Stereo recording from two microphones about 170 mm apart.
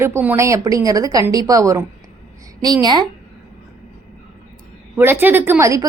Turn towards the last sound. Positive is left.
turn(degrees=-20)  # may be behind; listen again after turning